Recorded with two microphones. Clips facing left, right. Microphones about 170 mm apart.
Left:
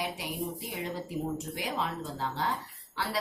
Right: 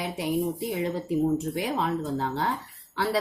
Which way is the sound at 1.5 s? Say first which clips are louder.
Right 6 dB; 50° right (ahead or behind).